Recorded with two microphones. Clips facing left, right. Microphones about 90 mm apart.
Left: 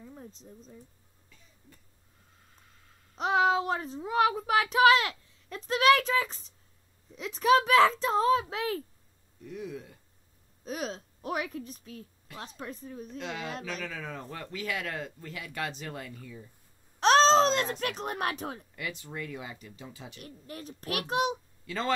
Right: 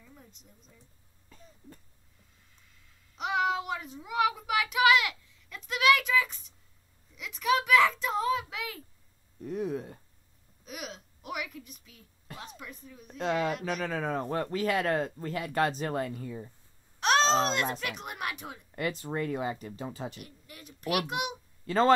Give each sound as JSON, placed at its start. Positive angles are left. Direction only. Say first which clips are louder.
{"t": 0.0, "sound": "a sound", "louder": "left 8 dB", "side_deg": 35}
{"t": 1.3, "sound": "cough", "louder": "right 8 dB", "side_deg": -40}
{"t": 2.5, "sound": "a child's voice", "louder": "left 4 dB", "side_deg": 40}
{"t": 9.4, "sound": "speech", "louder": "right 6 dB", "side_deg": -40}
{"t": 10.6, "sound": "a child's voice", "louder": "left 6 dB", "side_deg": 35}
{"t": 13.2, "sound": "speech", "louder": "right 9 dB", "side_deg": -45}
{"t": 17.0, "sound": "babbling", "louder": "left 4 dB", "side_deg": 35}
{"t": 17.7, "sound": "a child's voice", "louder": "left 4 dB", "side_deg": 40}
{"t": 18.8, "sound": "speech", "louder": "right 11 dB", "side_deg": -40}
{"t": 20.2, "sound": "a child's voice", "louder": "left 5 dB", "side_deg": 35}
{"t": 21.6, "sound": "speech", "louder": "right 8 dB", "side_deg": -40}